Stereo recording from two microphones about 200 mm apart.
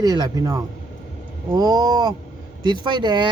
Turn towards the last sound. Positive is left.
turn(degrees=-20)  # may be behind; listen again after turning